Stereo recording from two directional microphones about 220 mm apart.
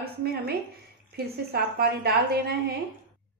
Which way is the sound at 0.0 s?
45° right (ahead or behind).